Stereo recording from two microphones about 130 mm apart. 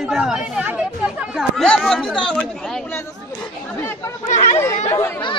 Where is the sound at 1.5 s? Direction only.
5° left (ahead or behind).